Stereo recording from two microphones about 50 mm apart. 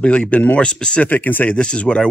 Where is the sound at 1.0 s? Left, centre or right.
Left.